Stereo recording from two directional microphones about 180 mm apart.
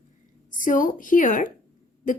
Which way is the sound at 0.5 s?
45° left (ahead or behind).